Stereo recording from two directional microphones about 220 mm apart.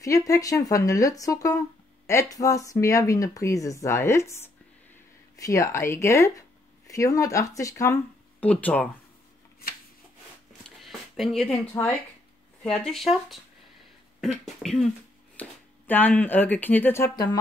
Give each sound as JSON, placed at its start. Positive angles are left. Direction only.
{"t": 0.0, "sound": "speech", "side_deg": 15}
{"t": 10.8, "sound": "speech", "side_deg": 0}